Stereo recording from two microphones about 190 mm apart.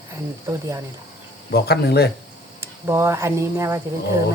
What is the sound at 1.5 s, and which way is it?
Speech, 60° left (ahead or behind).